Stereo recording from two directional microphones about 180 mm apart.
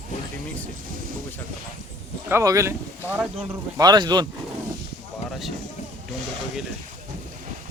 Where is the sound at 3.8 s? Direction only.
25° right (ahead or behind).